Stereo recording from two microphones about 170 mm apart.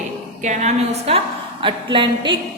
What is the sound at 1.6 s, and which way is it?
Speech, 30° right (ahead or behind).